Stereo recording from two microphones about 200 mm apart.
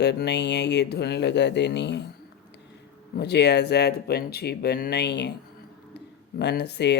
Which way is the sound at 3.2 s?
55° left (ahead or behind).